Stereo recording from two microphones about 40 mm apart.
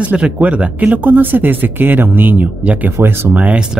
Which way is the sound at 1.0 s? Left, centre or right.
Right.